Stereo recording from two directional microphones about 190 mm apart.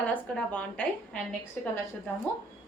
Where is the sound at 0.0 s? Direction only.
5° left (ahead or behind).